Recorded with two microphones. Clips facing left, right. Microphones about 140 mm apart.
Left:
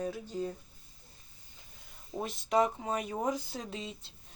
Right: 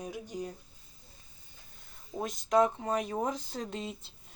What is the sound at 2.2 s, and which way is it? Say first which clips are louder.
Speech: right 2 dB; 5° left (ahead or behind).